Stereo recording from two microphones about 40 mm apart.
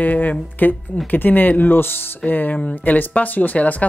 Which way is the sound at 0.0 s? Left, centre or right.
Left.